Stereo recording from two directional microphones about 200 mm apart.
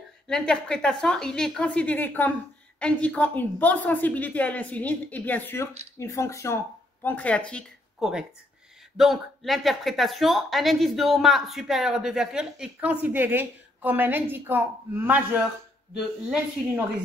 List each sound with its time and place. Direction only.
0.3 s a woman's voice: 5° left (ahead or behind)